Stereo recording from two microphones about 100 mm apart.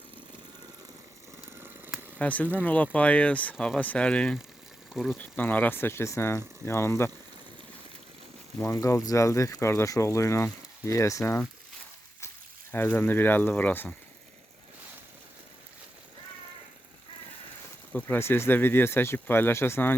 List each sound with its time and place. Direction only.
2.1 s speech: 15° left (ahead or behind)
8.5 s speech: 25° left (ahead or behind)
12.7 s speech: 20° left (ahead or behind)
17.9 s speech: 20° left (ahead or behind)